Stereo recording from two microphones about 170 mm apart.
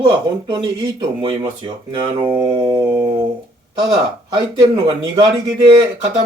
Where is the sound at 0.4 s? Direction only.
25° right (ahead or behind).